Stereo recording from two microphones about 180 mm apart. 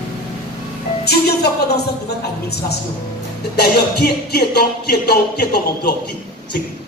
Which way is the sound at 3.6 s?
60° left (ahead or behind).